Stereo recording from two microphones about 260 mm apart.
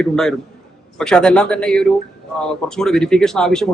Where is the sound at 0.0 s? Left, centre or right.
Centre.